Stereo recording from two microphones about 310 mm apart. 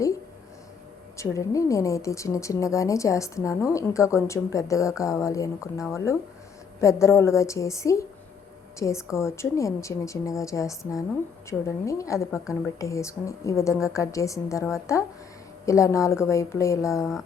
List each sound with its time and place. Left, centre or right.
1.1 s speech: centre